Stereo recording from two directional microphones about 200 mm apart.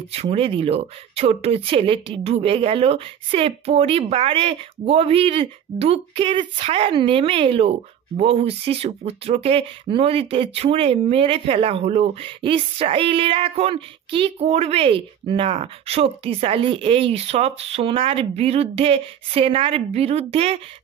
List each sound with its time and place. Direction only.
0.1 s speech: 30° right (ahead or behind)